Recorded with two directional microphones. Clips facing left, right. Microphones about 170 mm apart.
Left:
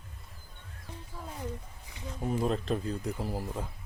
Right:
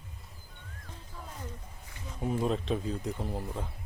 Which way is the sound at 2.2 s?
Centre (ahead or behind).